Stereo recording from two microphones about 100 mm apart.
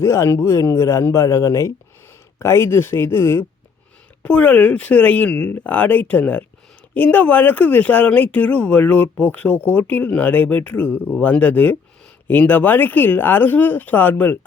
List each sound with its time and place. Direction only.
0.0 s speech: 30° left (ahead or behind)
4.2 s speech: 15° left (ahead or behind)